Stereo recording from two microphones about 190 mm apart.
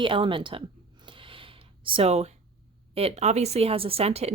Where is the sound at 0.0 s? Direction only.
25° right (ahead or behind).